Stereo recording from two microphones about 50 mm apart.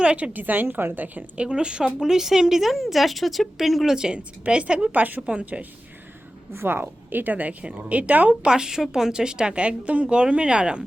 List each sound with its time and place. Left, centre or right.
0.0 s a woman's voice: centre
0.3 s a woman's voice: right
1.4 s speech: centre
3.9 s a woman's voice: centre
4.9 s a woman's voice: right
5.2 s a woman's voice: right
6.5 s speech: right
7.6 s a woman's voice: right
8.4 s a woman's voice: centre